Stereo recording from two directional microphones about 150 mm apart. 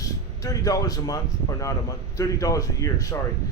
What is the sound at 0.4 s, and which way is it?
Speech, 25° left (ahead or behind).